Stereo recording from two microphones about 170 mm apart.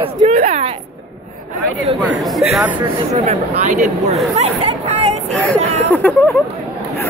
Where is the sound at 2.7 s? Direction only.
25° right (ahead or behind).